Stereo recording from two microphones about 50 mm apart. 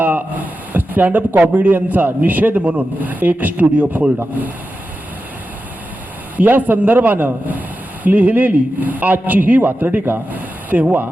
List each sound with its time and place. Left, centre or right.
0.0 s a man's voice: right
6.3 s a man's voice: right